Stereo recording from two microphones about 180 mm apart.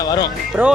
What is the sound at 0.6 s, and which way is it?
Speech, 10° right (ahead or behind).